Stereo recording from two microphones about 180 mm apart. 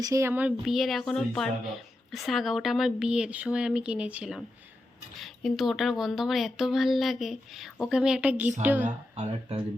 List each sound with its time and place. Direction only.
0.0 s speech: 15° right (ahead or behind)
8.8 s speech: 35° right (ahead or behind)